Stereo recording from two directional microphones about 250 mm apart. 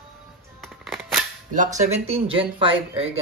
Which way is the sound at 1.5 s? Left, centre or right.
Right.